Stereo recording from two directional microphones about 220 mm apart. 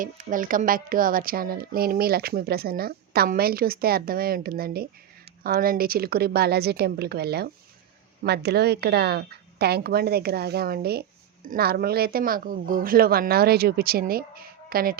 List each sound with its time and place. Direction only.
0.0 s a woman's voice: 35° right (ahead or behind)